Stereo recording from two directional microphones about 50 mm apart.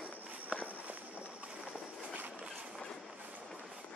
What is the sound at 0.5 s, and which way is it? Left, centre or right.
Walk, centre.